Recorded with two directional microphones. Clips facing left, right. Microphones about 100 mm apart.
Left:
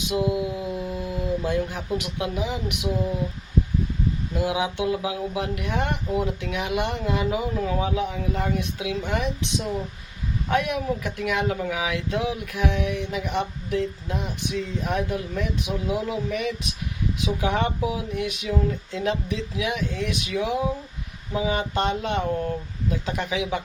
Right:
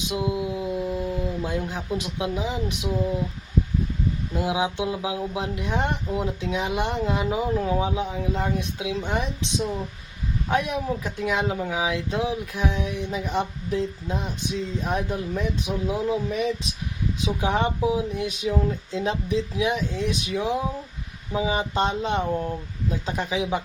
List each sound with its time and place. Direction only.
0.2 s speech: 20° right (ahead or behind)
0.8 s a sound: 20° right (ahead or behind)
1.5 s speech: 25° right (ahead or behind)
4.4 s speech: 25° right (ahead or behind)
13.0 s a sound: 30° right (ahead or behind)
17.2 s speech: 30° right (ahead or behind)
21.5 s a sound: 30° right (ahead or behind)
22.3 s speech: 15° right (ahead or behind)
22.9 s speech: 30° right (ahead or behind)